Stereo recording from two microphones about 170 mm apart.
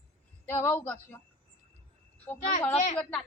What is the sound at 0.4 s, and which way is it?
Speech, 15° left (ahead or behind).